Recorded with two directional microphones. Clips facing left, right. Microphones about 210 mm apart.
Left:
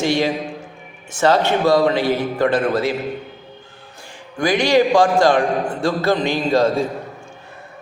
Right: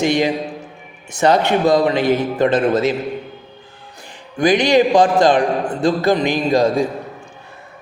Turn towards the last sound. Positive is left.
turn(degrees=-15)  # may be behind; listen again after turning